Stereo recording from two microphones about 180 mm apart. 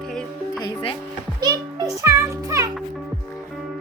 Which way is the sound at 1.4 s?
20° right (ahead or behind).